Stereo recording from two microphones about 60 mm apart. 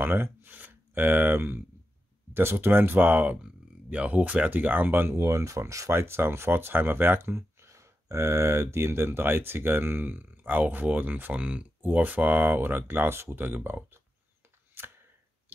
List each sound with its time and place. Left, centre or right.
0.0 s speech: right